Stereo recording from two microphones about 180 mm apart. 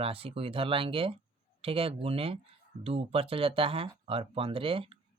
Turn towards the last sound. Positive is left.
turn(degrees=-30)  # may be behind; listen again after turning